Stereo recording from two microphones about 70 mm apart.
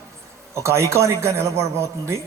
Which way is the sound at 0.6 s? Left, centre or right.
Right.